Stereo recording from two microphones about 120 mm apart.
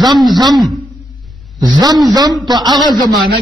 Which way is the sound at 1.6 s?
35° right (ahead or behind).